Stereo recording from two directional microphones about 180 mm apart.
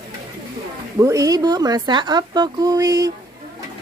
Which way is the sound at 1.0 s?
20° right (ahead or behind).